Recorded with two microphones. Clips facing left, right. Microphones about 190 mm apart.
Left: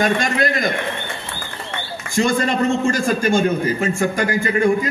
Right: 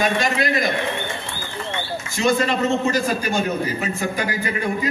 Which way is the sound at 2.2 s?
45° left (ahead or behind).